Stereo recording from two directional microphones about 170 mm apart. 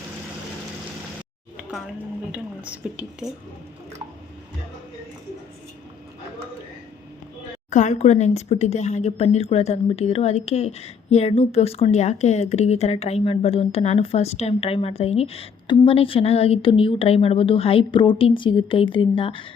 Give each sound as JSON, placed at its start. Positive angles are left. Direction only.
{"t": 2.3, "sound": "a woman's voice", "side_deg": -10}
{"t": 7.7, "sound": "speech", "side_deg": 45}